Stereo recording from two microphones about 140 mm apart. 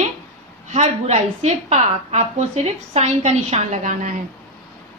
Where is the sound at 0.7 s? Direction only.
50° right (ahead or behind).